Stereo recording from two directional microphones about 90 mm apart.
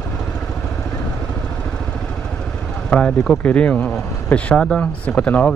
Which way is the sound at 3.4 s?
15° left (ahead or behind).